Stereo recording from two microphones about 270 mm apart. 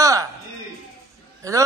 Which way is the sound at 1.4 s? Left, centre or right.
Centre.